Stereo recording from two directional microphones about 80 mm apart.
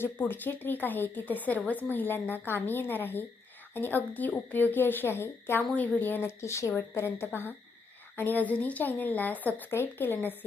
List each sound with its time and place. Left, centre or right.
0.0 s a woman's voice: left